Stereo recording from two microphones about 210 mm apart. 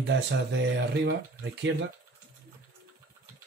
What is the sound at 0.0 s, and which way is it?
Speech, 55° right (ahead or behind).